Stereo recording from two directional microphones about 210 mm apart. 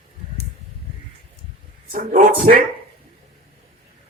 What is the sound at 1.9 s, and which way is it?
Speech, 40° right (ahead or behind).